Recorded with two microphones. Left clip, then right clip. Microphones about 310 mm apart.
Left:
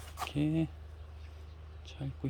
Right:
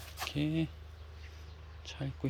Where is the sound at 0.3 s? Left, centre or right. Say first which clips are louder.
Left 1 dB; centre.